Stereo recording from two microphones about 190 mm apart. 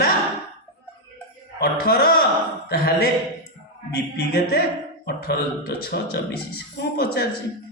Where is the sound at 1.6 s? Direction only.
55° left (ahead or behind).